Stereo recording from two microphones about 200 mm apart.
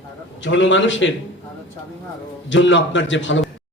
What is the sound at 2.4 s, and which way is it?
Speech, 70° left (ahead or behind).